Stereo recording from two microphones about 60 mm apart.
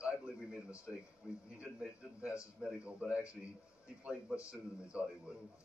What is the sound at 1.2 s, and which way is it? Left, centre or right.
Speech, centre.